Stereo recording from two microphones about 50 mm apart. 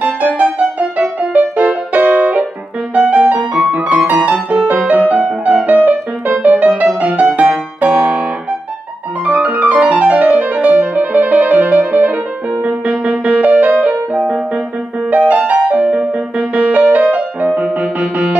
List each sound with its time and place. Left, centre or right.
0.0 s music: right
9.2 s music: right
15.0 s music: right